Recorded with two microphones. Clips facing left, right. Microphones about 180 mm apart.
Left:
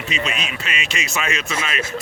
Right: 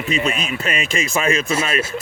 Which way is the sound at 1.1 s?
35° right (ahead or behind).